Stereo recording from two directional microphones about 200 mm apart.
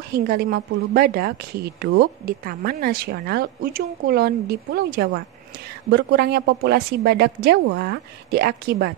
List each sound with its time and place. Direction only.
0.1 s a woman's voice: 50° right (ahead or behind)